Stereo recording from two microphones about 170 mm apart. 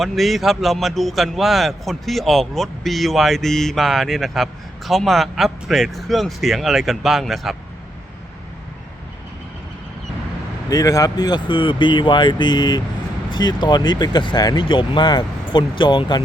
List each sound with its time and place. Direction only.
0.0 s a man's voice: centre (ahead or behind)
10.7 s speech: 20° left (ahead or behind)